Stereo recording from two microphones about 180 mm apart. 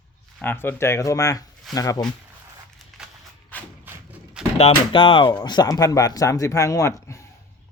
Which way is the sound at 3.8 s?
10° right (ahead or behind).